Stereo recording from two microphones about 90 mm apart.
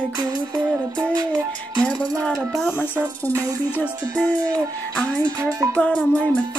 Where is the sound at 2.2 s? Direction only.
5° left (ahead or behind).